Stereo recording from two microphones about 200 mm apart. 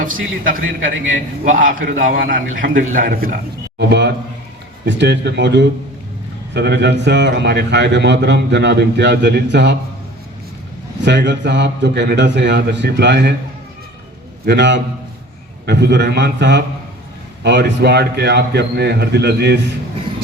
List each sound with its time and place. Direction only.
0.4 s a man's voice: 45° right (ahead or behind)
3.8 s a man's voice: 60° right (ahead or behind)
11.0 s a man's voice: 60° right (ahead or behind)
14.4 s a man's voice: 60° right (ahead or behind)